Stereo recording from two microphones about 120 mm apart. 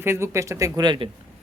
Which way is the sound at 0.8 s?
40° right (ahead or behind).